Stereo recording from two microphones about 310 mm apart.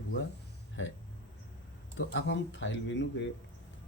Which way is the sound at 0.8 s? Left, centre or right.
Left.